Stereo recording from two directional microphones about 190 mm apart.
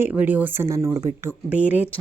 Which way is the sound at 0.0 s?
10° right (ahead or behind).